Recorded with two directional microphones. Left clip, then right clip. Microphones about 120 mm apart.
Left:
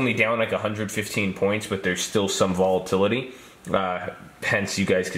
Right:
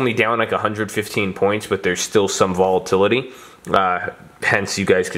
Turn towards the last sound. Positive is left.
turn(degrees=-45)  # may be behind; listen again after turning